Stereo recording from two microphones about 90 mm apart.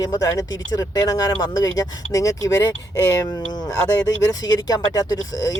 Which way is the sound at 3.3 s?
50° left (ahead or behind).